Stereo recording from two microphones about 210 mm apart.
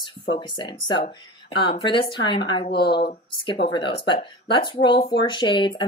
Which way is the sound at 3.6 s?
25° left (ahead or behind).